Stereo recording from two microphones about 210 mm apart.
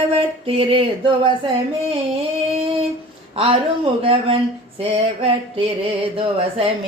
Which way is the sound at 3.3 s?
25° right (ahead or behind).